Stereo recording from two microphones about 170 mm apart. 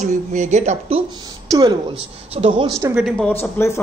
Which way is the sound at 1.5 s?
20° right (ahead or behind).